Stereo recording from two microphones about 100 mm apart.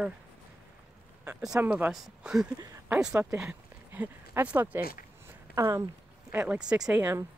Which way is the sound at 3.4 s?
20° right (ahead or behind).